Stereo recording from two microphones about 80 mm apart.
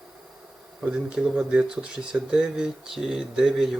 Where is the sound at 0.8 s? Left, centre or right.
Centre.